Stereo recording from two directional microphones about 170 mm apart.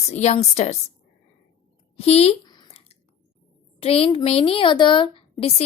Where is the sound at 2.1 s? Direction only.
35° left (ahead or behind).